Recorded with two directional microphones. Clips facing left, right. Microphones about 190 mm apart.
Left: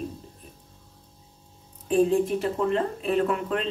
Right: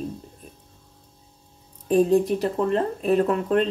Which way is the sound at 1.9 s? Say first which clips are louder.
Right 3 dB; 40° right (ahead or behind).